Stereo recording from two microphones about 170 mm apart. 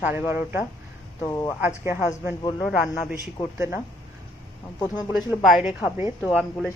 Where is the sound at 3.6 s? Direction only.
15° right (ahead or behind).